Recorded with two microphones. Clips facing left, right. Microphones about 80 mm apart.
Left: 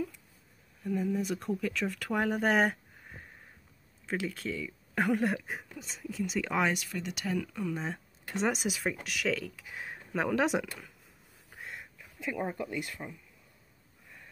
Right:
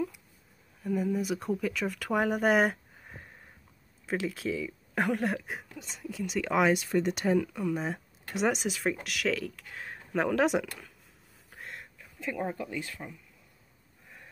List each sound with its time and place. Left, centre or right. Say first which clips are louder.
0.8 s speech: right 2 dB; centre
6.7 s speech: right 8 dB; right
7.0 s speech: right 9 dB; right
7.3 s speech: right 5 dB; centre
11.5 s a sound: even; centre
14.0 s gasp: right 2 dB; centre